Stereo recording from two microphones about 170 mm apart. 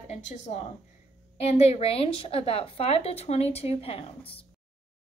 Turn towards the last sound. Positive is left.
turn(degrees=35)  # may be behind; listen again after turning